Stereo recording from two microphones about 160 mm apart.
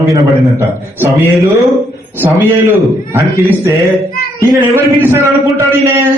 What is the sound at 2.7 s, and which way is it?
A man's voice, 15° right (ahead or behind).